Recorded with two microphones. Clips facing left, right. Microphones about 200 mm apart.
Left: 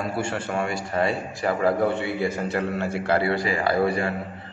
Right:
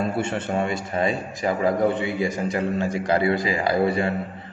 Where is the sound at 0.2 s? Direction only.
20° right (ahead or behind).